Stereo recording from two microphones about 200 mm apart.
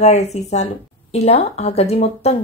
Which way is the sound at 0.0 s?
35° left (ahead or behind).